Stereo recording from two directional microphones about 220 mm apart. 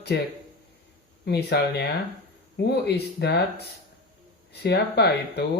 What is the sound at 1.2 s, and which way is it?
Speech, 50° left (ahead or behind).